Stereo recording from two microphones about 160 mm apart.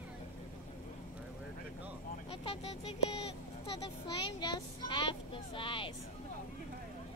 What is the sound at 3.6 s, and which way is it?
Speech, 25° left (ahead or behind).